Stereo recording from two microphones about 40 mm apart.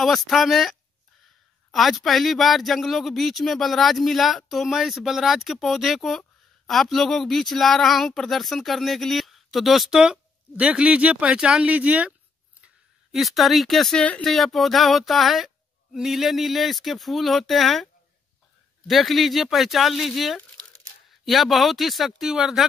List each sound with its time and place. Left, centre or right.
0.0 s speech: centre
9.8 s speech: centre
10.5 s speech: right
11.3 s speech: right
13.1 s speech: centre
18.9 s speech: centre